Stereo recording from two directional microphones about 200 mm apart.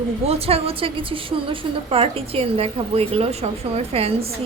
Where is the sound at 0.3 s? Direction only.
30° right (ahead or behind).